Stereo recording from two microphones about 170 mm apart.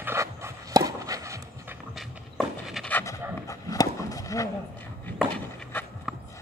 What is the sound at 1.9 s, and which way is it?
Walk, centre (ahead or behind).